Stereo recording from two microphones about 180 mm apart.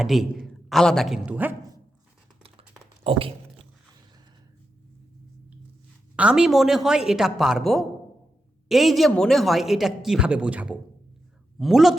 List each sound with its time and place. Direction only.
0.0 s a woman's voice: centre (ahead or behind)
3.0 s a sound: 30° right (ahead or behind)
6.1 s a man's voice: 5° right (ahead or behind)